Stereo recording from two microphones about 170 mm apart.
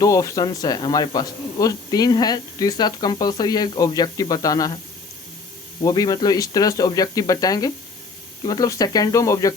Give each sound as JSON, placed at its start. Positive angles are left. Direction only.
{"t": 0.0, "sound": "speech", "side_deg": 20}
{"t": 5.8, "sound": "speech", "side_deg": 20}